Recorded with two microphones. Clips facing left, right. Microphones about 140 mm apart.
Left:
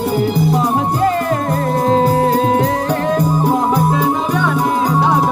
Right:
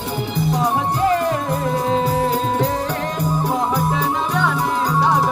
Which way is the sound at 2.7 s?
70° left (ahead or behind).